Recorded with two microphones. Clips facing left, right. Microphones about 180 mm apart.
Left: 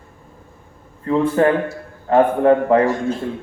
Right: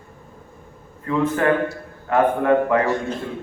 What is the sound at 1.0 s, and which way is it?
A man's voice, 30° left (ahead or behind).